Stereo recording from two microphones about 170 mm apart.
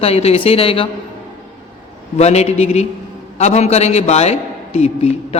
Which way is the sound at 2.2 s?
40° left (ahead or behind).